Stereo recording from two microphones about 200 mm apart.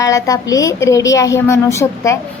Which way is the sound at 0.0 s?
15° left (ahead or behind).